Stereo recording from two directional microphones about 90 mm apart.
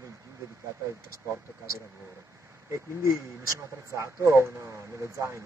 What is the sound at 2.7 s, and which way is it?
Speech, 30° right (ahead or behind).